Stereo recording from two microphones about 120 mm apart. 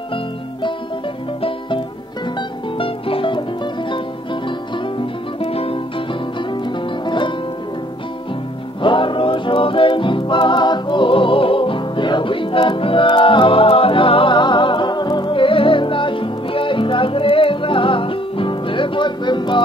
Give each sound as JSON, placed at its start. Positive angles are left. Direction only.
{"t": 0.1, "sound": "music", "side_deg": 45}
{"t": 2.8, "sound": "music", "side_deg": 50}
{"t": 5.4, "sound": "music", "side_deg": 55}
{"t": 7.1, "sound": "music", "side_deg": 40}
{"t": 8.8, "sound": "music", "side_deg": 45}